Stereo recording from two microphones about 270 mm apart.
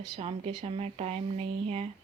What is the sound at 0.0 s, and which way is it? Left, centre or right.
Speech, right.